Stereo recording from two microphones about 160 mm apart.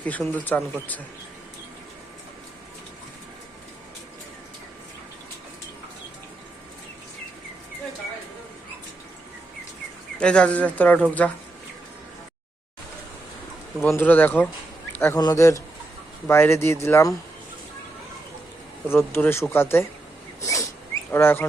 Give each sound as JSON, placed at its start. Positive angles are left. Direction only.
{"t": 0.0, "sound": "speech", "side_deg": 10}
{"t": 10.2, "sound": "speech", "side_deg": 5}
{"t": 13.8, "sound": "speech", "side_deg": 10}
{"t": 18.9, "sound": "speech", "side_deg": 15}
{"t": 20.4, "sound": "rodents", "side_deg": 20}
{"t": 21.1, "sound": "speech", "side_deg": 15}